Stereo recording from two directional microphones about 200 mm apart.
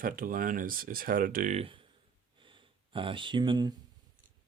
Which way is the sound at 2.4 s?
25° right (ahead or behind).